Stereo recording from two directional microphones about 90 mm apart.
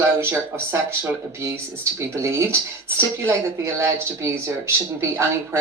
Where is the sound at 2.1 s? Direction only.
30° right (ahead or behind).